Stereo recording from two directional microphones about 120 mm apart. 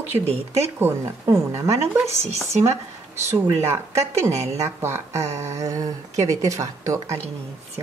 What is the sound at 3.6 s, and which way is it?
Speech, 25° right (ahead or behind).